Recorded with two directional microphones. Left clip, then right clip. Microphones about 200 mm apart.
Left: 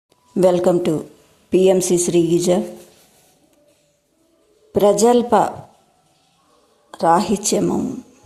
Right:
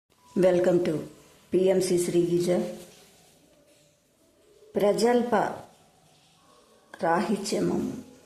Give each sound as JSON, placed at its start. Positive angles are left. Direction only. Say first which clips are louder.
{"t": 0.3, "sound": "a woman's voice", "louder": "left 7 dB", "side_deg": 15}
{"t": 4.7, "sound": "a woman's voice", "louder": "left 9 dB", "side_deg": 20}
{"t": 6.9, "sound": "speech", "louder": "left 10 dB", "side_deg": 15}